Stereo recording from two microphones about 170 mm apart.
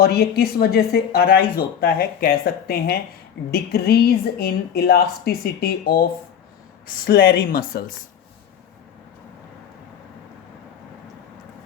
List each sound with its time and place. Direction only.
0.0 s speech: 70° left (ahead or behind)